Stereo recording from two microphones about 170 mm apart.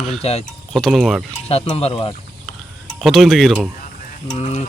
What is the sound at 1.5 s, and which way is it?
Speech, 35° left (ahead or behind).